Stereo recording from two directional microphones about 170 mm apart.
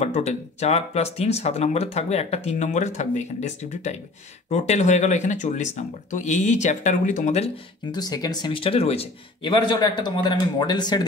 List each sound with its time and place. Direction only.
0.0 s speech: 40° left (ahead or behind)
7.9 s speech: 25° left (ahead or behind)